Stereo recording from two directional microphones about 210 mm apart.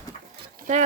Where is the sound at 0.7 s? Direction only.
40° right (ahead or behind).